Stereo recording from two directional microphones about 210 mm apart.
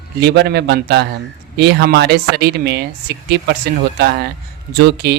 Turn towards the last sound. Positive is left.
turn(degrees=-55)  # may be behind; listen again after turning